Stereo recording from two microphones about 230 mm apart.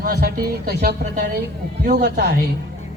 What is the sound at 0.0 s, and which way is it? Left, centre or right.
A man's voice, right.